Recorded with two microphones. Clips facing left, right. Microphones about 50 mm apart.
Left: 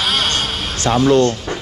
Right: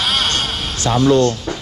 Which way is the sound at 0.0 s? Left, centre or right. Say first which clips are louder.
Even; centre.